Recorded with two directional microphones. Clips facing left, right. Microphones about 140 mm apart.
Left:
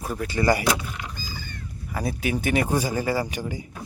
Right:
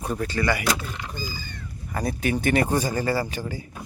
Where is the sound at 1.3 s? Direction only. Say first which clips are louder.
Even; 60° left (ahead or behind).